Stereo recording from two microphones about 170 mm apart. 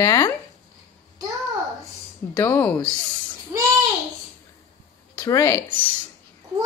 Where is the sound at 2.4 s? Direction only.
10° left (ahead or behind).